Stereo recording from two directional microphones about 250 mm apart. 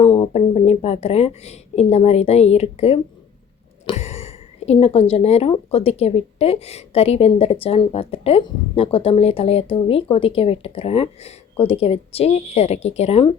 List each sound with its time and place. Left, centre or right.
0.0 s speech: centre